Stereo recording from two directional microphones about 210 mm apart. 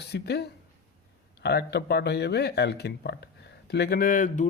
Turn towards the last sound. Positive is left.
turn(degrees=40)  # may be behind; listen again after turning